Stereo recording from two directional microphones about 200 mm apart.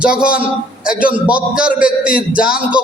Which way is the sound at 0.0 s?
5° right (ahead or behind).